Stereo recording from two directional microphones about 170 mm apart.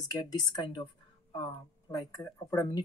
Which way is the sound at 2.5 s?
20° left (ahead or behind).